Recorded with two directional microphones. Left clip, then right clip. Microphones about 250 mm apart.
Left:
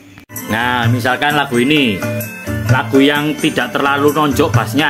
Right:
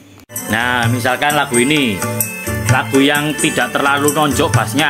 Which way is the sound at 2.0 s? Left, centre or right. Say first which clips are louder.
Even; right.